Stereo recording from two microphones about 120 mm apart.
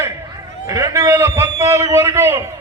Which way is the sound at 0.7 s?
25° right (ahead or behind).